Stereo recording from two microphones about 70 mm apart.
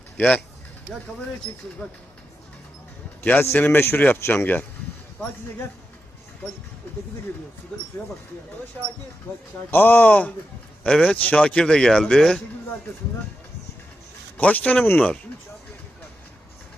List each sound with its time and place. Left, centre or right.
0.2 s speech: left
1.8 s speech: centre
3.2 s speech: left
9.6 s speech: left; by 12.4 s centre
14.3 s speech: left